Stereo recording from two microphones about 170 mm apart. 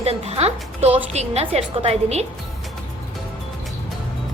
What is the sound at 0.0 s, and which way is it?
A woman's voice, 35° right (ahead or behind).